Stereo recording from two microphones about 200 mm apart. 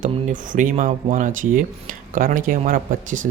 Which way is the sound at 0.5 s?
40° right (ahead or behind).